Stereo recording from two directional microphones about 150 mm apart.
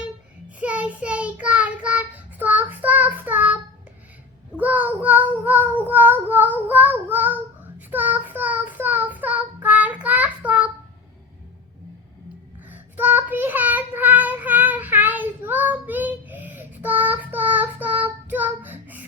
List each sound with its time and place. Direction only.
0.6 s child singing: 10° right (ahead or behind)
12.6 s child singing: 10° right (ahead or behind)